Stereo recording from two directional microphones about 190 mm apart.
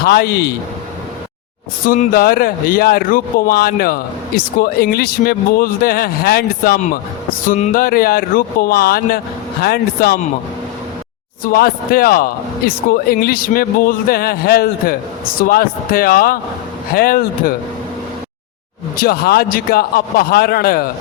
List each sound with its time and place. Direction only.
0.0 s speech: 55° left (ahead or behind)
1.9 s speech: 50° left (ahead or behind)
11.4 s speech: 50° left (ahead or behind)
18.9 s speech: 50° left (ahead or behind)